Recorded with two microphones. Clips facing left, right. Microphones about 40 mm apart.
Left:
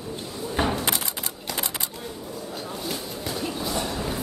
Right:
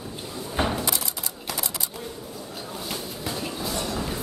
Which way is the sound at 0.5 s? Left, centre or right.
Centre.